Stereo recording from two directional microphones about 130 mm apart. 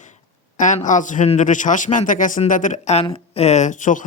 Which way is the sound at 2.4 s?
80° left.